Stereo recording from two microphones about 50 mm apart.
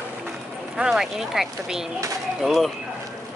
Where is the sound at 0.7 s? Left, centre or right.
Centre.